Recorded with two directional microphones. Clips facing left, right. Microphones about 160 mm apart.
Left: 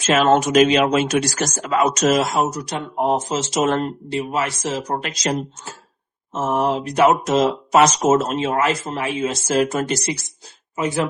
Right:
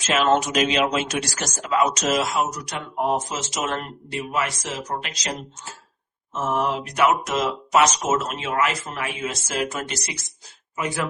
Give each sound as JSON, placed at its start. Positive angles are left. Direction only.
{"t": 0.1, "sound": "speech", "side_deg": 45}
{"t": 2.5, "sound": "speech", "side_deg": 30}
{"t": 6.3, "sound": "speech", "side_deg": 30}
{"t": 10.8, "sound": "speech", "side_deg": 25}